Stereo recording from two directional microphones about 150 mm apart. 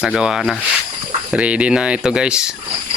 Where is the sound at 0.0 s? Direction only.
5° right (ahead or behind).